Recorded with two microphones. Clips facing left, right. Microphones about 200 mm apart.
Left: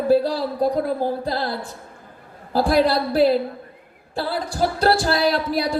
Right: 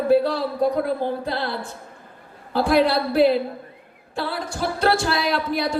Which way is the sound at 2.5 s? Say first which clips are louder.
Left 1 dB; 35° left (ahead or behind).